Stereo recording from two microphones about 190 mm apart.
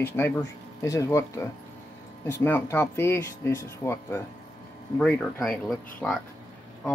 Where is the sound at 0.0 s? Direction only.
15° left (ahead or behind).